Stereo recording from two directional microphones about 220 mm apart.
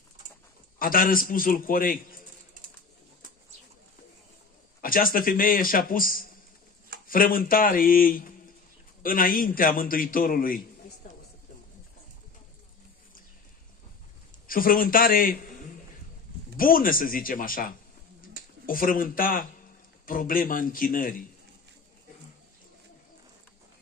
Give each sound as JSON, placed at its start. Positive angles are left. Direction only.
{"t": 0.7, "sound": "a man's voice", "side_deg": 40}
{"t": 4.8, "sound": "a man's voice", "side_deg": 40}
{"t": 14.5, "sound": "a man's voice", "side_deg": 40}
{"t": 16.5, "sound": "a man's voice", "side_deg": 40}